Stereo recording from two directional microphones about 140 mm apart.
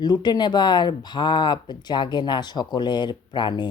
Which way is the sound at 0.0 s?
30° left (ahead or behind).